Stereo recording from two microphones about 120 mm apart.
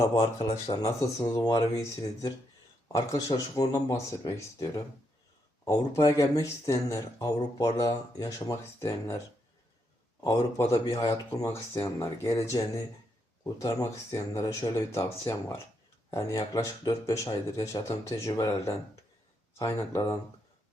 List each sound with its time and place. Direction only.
0.0 s speech: 30° left (ahead or behind)
10.7 s speech: 30° left (ahead or behind)